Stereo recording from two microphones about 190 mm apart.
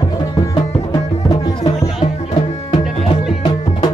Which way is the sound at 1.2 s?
20° left (ahead or behind).